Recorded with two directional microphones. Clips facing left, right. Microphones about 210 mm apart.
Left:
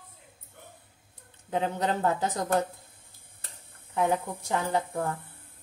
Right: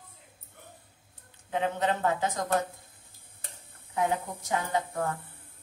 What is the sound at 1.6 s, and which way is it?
Speech, 40° left (ahead or behind).